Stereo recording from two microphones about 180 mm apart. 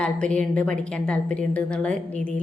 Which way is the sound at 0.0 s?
5° left (ahead or behind).